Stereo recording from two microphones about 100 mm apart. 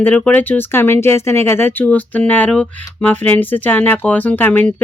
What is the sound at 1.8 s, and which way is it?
Speech, 15° left (ahead or behind).